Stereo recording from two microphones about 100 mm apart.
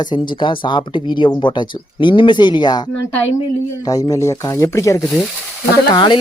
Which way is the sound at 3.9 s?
35° left (ahead or behind).